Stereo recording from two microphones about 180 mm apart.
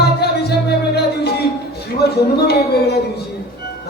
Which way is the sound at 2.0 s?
65° left (ahead or behind).